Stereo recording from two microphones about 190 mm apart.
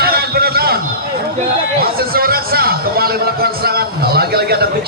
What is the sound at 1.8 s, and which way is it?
A man's voice, 50° right (ahead or behind).